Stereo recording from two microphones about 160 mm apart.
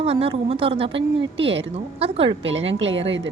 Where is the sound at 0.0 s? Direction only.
35° right (ahead or behind).